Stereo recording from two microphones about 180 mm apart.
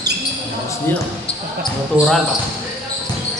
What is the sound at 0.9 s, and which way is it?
Speech, 10° left (ahead or behind).